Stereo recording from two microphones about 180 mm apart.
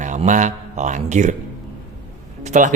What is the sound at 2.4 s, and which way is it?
Speech, 45° right (ahead or behind).